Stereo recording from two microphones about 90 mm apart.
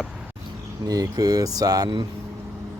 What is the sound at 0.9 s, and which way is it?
Speech, 40° right (ahead or behind).